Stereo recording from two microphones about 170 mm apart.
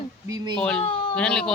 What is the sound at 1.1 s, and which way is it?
Speech, 5° left (ahead or behind).